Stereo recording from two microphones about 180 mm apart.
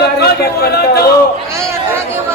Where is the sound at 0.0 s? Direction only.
65° left (ahead or behind).